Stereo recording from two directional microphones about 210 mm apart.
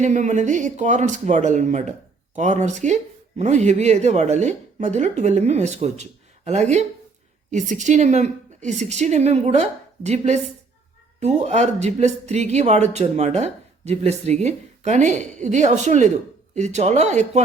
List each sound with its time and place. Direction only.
0.0 s speech: 35° right (ahead or behind)